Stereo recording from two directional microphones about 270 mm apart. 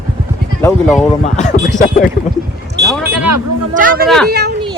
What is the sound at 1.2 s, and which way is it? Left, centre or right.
Speech, left.